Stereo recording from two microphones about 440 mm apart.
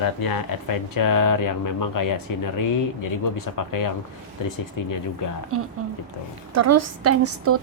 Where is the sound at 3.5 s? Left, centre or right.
Left.